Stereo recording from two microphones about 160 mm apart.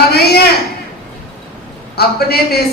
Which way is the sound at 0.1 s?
80° left.